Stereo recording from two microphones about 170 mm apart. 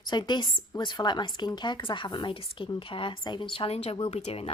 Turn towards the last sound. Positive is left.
turn(degrees=35)  # may be behind; listen again after turning